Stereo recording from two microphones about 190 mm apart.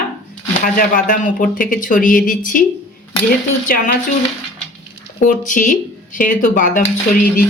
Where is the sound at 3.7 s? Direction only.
50° left (ahead or behind).